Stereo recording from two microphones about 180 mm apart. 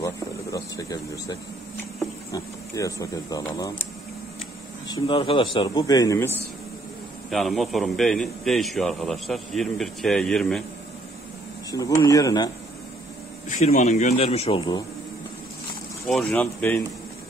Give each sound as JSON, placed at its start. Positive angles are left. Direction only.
{"t": 0.0, "sound": "vehicle", "side_deg": 20}
{"t": 2.3, "sound": "speech", "side_deg": 20}
{"t": 4.8, "sound": "speech", "side_deg": 20}
{"t": 7.2, "sound": "a man's voice", "side_deg": 0}
{"t": 11.7, "sound": "speech", "side_deg": 20}
{"t": 13.5, "sound": "a man's voice", "side_deg": 45}
{"t": 16.1, "sound": "a man's voice", "side_deg": 0}
{"t": 16.3, "sound": "speech", "side_deg": 10}